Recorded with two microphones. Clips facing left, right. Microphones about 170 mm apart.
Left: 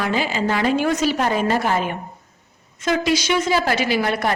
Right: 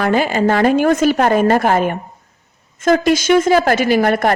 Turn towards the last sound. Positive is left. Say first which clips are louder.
# right 7 dB
turn(degrees=-50)  # may be behind; listen again after turning